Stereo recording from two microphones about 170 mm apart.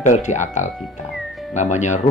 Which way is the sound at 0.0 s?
45° left (ahead or behind).